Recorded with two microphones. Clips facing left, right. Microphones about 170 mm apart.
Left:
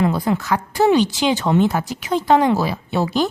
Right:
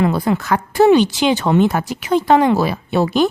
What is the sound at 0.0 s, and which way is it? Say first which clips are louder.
A woman's voice: right 2 dB; 70° right (ahead or behind).